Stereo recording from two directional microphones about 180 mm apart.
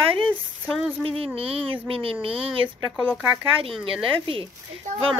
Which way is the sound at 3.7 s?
Centre (ahead or behind).